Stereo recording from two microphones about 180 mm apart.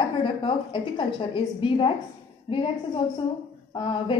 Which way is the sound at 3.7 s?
30° left (ahead or behind).